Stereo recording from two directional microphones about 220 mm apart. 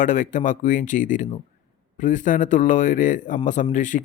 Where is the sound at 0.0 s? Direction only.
35° left (ahead or behind).